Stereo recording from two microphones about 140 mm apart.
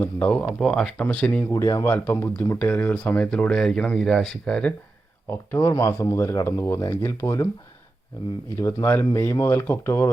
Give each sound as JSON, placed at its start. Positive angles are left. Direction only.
{"t": 0.0, "sound": "speech", "side_deg": 10}
{"t": 1.5, "sound": "speech", "side_deg": 20}
{"t": 8.6, "sound": "speech", "side_deg": 15}